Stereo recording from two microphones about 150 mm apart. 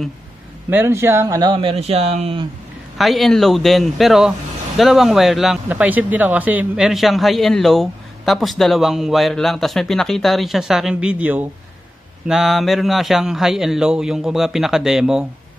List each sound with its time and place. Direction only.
0.7 s speech: 15° right (ahead or behind); by 2.4 s 40° right (ahead or behind)
3.0 s speech: centre (ahead or behind)